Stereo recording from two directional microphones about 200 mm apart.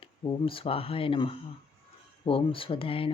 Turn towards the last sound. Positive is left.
turn(degrees=25)  # may be behind; listen again after turning